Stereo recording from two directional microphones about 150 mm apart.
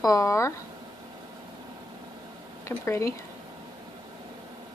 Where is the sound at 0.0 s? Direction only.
20° left (ahead or behind).